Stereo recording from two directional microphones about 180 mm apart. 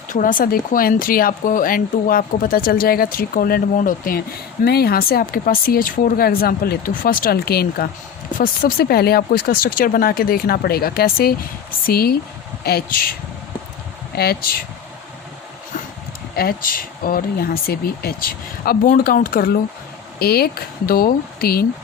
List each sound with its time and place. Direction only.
0.1 s speech: 50° left (ahead or behind)
14.2 s speech: 60° left (ahead or behind)
16.3 s speech: 55° left (ahead or behind)